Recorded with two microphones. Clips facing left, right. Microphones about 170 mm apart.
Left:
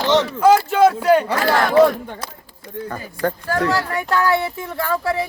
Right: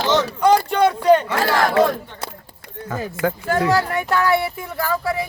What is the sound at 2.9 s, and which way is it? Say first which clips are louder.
Speech: right 2 dB; 5° right (ahead or behind).